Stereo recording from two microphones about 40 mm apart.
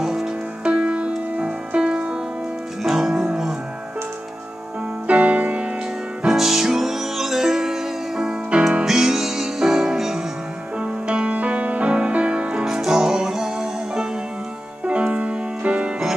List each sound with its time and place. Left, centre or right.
0.0 s music: centre
0.7 s music: right
2.8 s music: centre
5.0 s music: right
6.2 s music: centre
10.8 s music: right
12.6 s music: centre
14.9 s music: right